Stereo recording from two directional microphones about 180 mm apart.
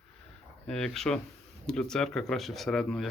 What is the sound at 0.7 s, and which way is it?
Speech, 5° left (ahead or behind).